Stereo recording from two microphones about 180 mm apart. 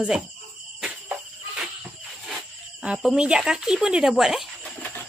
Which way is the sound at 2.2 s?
5° right (ahead or behind).